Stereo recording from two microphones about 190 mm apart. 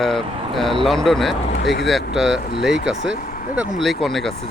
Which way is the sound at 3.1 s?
45° left (ahead or behind).